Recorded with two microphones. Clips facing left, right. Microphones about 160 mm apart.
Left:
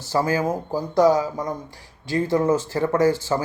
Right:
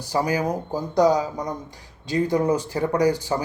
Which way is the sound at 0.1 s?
15° right (ahead or behind).